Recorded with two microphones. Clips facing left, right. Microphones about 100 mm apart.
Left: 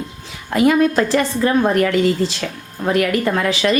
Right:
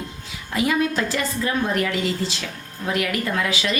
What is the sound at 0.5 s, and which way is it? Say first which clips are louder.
Speech: left 7 dB; 50° left (ahead or behind).